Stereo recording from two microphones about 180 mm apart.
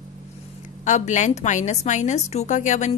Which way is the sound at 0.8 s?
40° left (ahead or behind).